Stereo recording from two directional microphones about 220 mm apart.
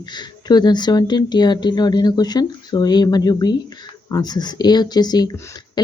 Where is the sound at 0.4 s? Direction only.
20° left (ahead or behind).